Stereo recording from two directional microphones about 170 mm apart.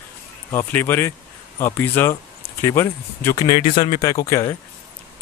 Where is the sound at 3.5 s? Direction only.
30° left (ahead or behind).